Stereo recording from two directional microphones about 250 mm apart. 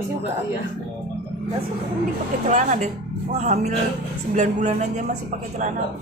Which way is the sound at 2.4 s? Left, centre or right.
Right.